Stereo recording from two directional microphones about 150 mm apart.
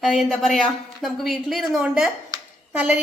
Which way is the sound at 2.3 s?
25° right (ahead or behind).